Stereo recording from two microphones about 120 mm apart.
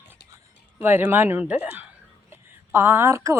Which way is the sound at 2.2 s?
20° right (ahead or behind).